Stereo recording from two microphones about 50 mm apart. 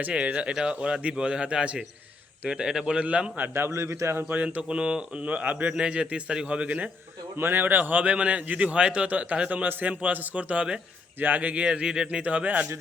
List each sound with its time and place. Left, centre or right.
0.1 s a man's voice: right
3.0 s a man's voice: right
3.4 s a man's voice: right
3.7 s a man's voice: right
4.2 s a man's voice: right
7.3 s a man's voice: right
11.2 s a man's voice: right; by 12.2 s centre
12.2 s a man's voice: right